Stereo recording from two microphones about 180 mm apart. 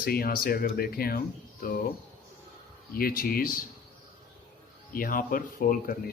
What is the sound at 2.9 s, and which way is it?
Speech, 55° left (ahead or behind).